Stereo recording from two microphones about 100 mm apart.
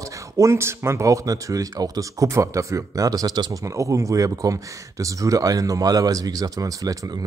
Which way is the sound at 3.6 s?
30° right (ahead or behind).